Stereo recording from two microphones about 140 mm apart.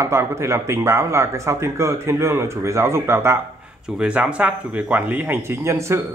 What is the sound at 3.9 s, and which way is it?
A man's voice, 5° right (ahead or behind).